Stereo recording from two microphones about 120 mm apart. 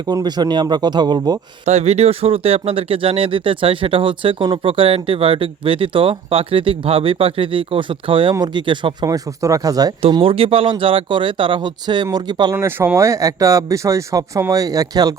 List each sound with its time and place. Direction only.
0.0 s speech: 35° right (ahead or behind)
1.6 s speech: 65° right (ahead or behind); by 9.9 s 30° right (ahead or behind)
10.1 s speech: 45° right (ahead or behind)
12.5 s speech: 20° right (ahead or behind)